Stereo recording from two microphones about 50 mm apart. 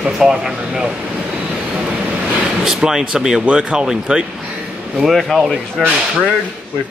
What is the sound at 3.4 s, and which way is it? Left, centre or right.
Speech, right.